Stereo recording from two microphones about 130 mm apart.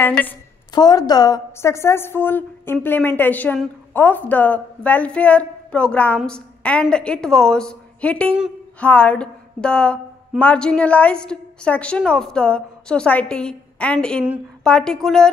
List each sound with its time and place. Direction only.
0.0 s a woman's voice: 15° left (ahead or behind)
0.7 s a woman's voice: 30° left (ahead or behind); by 15.0 s 5° left (ahead or behind)